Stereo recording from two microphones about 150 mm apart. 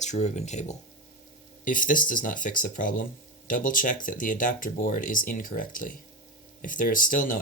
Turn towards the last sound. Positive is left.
turn(degrees=60)  # may be behind; listen again after turning